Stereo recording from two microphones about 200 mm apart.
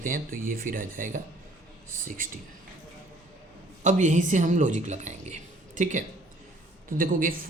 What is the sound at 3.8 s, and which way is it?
A woman's voice, 35° right (ahead or behind).